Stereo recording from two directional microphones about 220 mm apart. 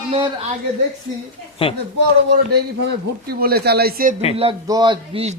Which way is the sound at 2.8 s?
45° right (ahead or behind).